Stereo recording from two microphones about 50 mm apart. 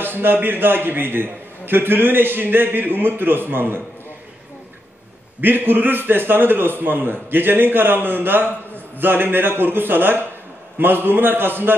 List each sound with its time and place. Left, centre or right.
0.0 s a man's voice: right
5.4 s a man's voice: right